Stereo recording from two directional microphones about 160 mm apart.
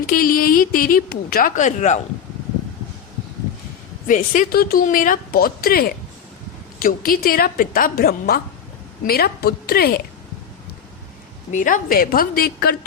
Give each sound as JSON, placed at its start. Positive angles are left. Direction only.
{"t": 0.1, "sound": "a woman's voice", "side_deg": 65}
{"t": 4.0, "sound": "a woman's voice", "side_deg": 55}
{"t": 11.5, "sound": "a woman's voice", "side_deg": 55}